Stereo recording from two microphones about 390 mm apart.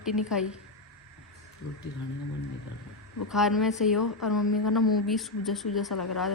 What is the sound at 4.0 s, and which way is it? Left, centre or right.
Speech, left.